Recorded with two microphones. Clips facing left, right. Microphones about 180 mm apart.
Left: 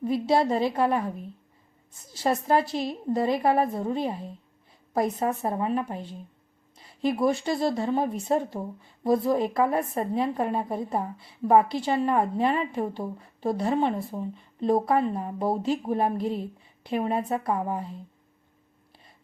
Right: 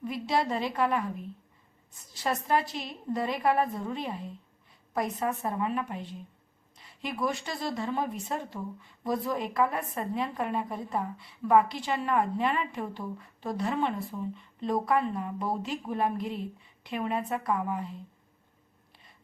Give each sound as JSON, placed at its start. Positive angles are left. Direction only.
{"t": 0.0, "sound": "a woman's voice", "side_deg": 30}
{"t": 2.1, "sound": "a woman's voice", "side_deg": 30}